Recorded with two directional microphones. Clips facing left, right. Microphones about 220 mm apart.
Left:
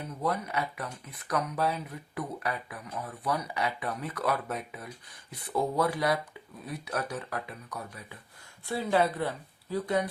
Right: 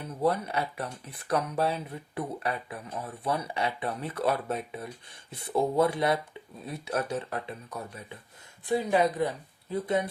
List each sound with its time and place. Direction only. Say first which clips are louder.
0.2 s speech: right 4 dB; 30° right (ahead or behind)